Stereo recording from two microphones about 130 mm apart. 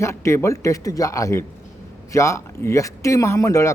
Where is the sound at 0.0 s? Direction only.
20° left (ahead or behind).